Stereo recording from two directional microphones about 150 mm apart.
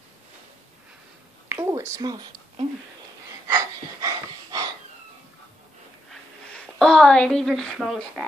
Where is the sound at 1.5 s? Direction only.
20° right (ahead or behind).